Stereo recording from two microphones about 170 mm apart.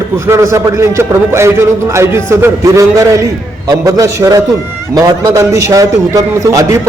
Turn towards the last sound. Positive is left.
turn(degrees=-20)  # may be behind; listen again after turning